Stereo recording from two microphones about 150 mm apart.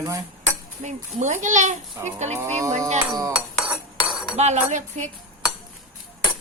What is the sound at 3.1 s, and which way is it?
Speech, 25° right (ahead or behind).